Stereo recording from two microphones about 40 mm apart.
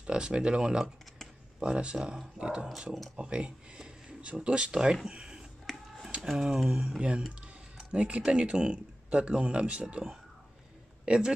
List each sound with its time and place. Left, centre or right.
0.0 s speech: right
5.0 s a sound: centre
6.3 s speech: centre
7.0 s speech: right
11.1 s speech: centre